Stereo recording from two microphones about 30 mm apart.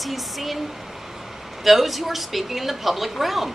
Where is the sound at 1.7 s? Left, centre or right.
Centre.